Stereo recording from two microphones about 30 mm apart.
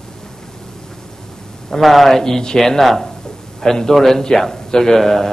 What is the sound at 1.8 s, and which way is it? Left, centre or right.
A man's voice, centre.